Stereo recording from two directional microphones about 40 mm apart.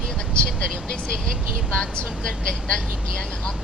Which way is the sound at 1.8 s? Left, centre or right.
Left.